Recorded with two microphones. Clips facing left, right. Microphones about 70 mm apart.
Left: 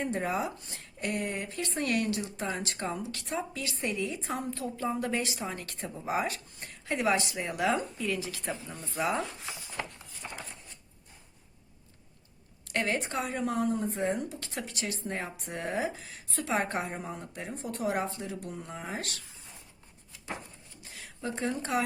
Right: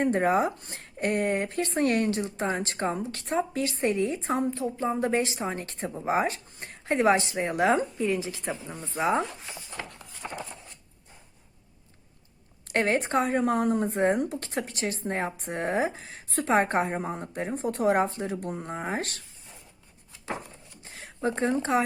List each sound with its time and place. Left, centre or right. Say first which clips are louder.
0.0 s speech: right 8 dB; right
4.5 s speech: right 4 dB; right
12.7 s speech: right 6 dB; right
20.8 s speech: right 8 dB; right